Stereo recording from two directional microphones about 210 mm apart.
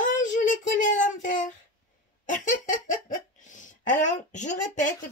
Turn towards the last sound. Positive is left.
turn(degrees=35)  # may be behind; listen again after turning